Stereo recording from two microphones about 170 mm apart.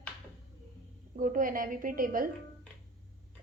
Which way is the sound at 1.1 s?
50° right (ahead or behind).